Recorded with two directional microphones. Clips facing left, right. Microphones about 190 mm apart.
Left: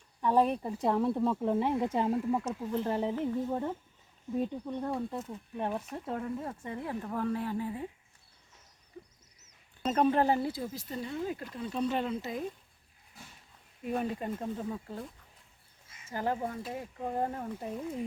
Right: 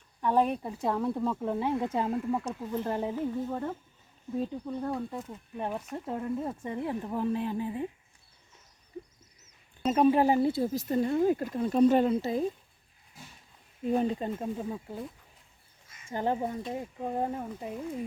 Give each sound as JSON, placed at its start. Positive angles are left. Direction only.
{"t": 0.2, "sound": "speech", "side_deg": 0}
{"t": 3.5, "sound": "a woman's voice", "side_deg": 10}
{"t": 9.8, "sound": "a woman's voice", "side_deg": -5}
{"t": 10.7, "sound": "speech", "side_deg": -45}
{"t": 13.8, "sound": "a woman's voice", "side_deg": -25}
{"t": 16.1, "sound": "speech", "side_deg": -20}
{"t": 17.0, "sound": "a woman's voice", "side_deg": -10}